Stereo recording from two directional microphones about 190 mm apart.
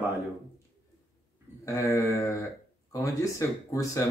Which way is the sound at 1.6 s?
15° left (ahead or behind).